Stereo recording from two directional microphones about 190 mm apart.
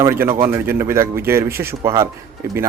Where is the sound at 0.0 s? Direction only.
15° right (ahead or behind).